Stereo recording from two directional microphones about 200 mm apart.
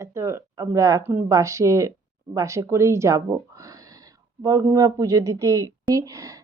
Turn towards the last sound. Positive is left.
turn(degrees=-15)  # may be behind; listen again after turning